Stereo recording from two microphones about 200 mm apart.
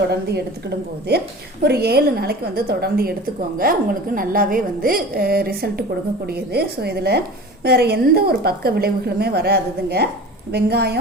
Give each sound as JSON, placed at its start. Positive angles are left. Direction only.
{"t": 0.1, "sound": "a woman's voice", "side_deg": -55}
{"t": 1.6, "sound": "a woman's voice", "side_deg": -55}